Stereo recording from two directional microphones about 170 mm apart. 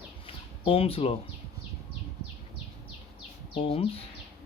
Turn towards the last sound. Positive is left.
turn(degrees=35)  # may be behind; listen again after turning